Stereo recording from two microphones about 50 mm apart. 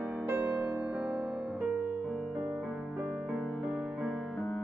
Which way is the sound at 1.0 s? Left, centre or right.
Right.